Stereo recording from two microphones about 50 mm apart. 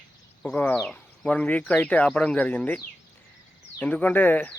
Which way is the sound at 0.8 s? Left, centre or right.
Left.